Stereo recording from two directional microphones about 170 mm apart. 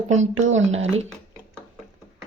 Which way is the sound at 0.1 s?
45° right (ahead or behind).